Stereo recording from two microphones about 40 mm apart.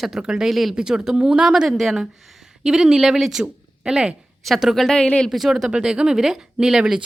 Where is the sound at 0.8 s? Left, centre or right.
Centre.